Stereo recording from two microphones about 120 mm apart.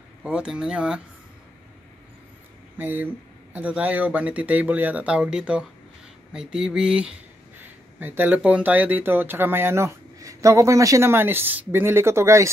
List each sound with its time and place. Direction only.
0.2 s speech: 5° right (ahead or behind)
2.8 s speech: 15° right (ahead or behind)